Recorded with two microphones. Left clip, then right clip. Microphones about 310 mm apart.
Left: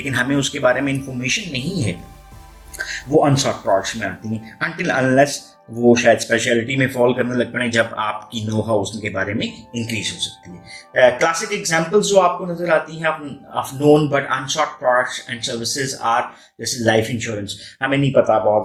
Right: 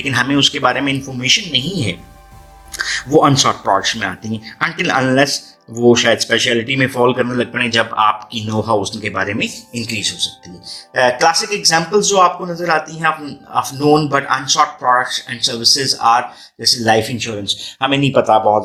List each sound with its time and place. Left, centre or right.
0.0 s a man's voice: centre